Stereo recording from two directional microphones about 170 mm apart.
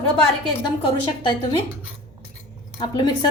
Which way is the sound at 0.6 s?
30° left (ahead or behind).